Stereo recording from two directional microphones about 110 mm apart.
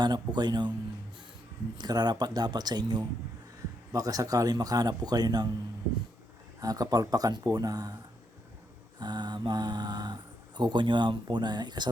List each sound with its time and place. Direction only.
0.0 s speech: 40° right (ahead or behind)
1.8 s speech: 40° right (ahead or behind)
6.6 s speech: 35° right (ahead or behind)
9.0 s speech: 40° right (ahead or behind)